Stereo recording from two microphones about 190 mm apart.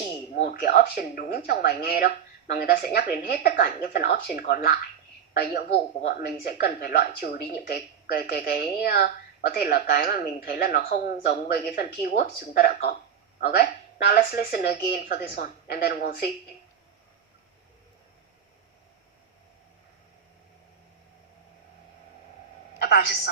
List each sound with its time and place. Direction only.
0.4 s speech: 50° left (ahead or behind)
6.1 s speech: 55° left (ahead or behind)
22.8 s speech: 55° left (ahead or behind)